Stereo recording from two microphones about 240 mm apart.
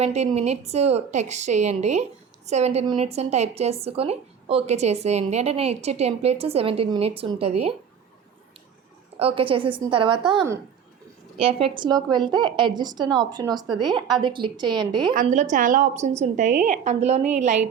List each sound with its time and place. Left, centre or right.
0.0 s a woman's voice: right
9.1 s a woman's voice: right
15.1 s a woman's voice: right